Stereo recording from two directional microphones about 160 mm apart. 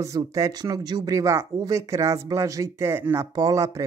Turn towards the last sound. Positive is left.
turn(degrees=-20)  # may be behind; listen again after turning